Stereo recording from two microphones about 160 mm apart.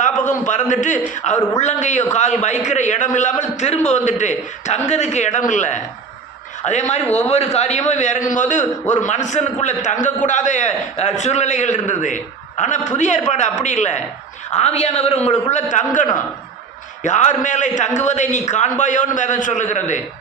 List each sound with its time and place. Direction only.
0.0 s a man's voice: 50° left (ahead or behind)